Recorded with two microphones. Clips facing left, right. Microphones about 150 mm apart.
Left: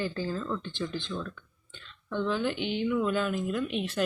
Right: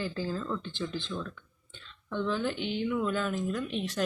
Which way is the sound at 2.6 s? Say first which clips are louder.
Left 2 dB; 60° left (ahead or behind).